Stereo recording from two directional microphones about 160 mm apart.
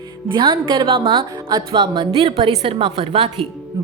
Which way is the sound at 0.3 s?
30° right (ahead or behind).